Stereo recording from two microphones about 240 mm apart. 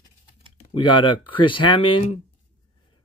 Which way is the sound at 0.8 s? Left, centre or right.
Centre.